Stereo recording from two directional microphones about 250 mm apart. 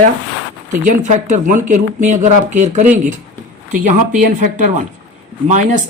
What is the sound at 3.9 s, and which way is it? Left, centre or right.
Speech, right.